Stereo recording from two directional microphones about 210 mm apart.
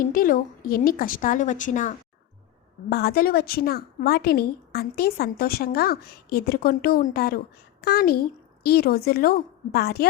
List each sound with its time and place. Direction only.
0.0 s a woman's voice: 40° left (ahead or behind)
2.9 s a woman's voice: 45° left (ahead or behind)